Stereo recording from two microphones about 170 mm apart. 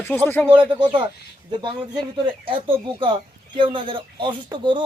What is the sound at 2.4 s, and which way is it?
Speech, 30° right (ahead or behind).